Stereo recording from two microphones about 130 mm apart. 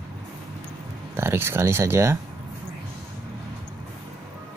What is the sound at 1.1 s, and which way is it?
Speech, 20° right (ahead or behind).